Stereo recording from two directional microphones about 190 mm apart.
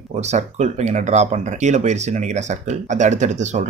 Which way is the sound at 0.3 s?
35° right (ahead or behind).